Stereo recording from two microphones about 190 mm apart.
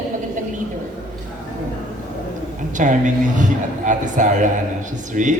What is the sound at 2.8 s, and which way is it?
A woman's voice, 45° right (ahead or behind).